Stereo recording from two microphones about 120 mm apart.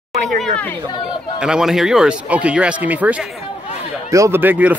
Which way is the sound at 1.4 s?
5° right (ahead or behind).